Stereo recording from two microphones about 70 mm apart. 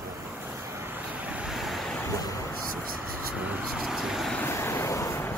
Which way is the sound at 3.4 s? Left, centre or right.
Right.